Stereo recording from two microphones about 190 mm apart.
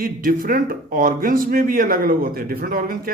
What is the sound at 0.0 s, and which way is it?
Speech, 50° right (ahead or behind).